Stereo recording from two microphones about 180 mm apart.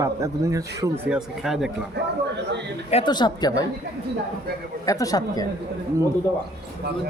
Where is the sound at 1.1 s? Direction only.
Centre (ahead or behind).